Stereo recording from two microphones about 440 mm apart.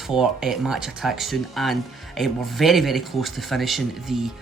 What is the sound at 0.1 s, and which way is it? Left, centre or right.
Speech, centre.